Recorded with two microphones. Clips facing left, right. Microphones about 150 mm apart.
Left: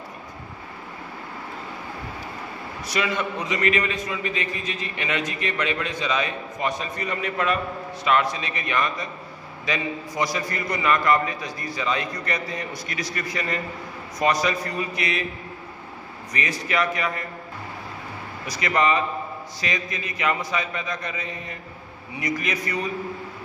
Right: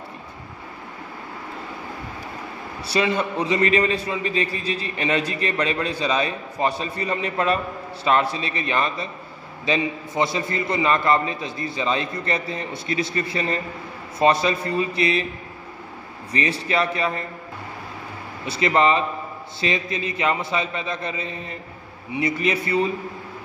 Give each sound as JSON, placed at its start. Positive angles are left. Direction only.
{"t": 2.9, "sound": "a man's voice", "side_deg": -30}
{"t": 16.3, "sound": "a man's voice", "side_deg": -30}
{"t": 18.4, "sound": "a man's voice", "side_deg": -30}